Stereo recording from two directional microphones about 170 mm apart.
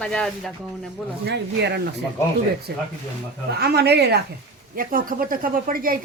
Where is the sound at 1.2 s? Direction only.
80° right.